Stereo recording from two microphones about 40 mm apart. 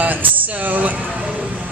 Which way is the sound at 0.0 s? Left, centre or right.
Right.